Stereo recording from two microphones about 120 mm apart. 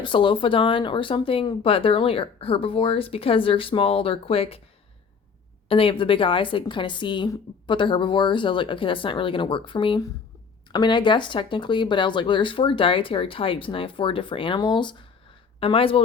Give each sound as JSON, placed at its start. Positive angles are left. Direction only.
{"t": 0.0, "sound": "speech", "side_deg": 45}
{"t": 5.6, "sound": "speech", "side_deg": 50}